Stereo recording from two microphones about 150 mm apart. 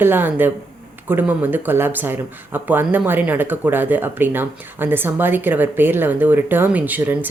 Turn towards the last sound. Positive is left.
turn(degrees=-10)  # may be behind; listen again after turning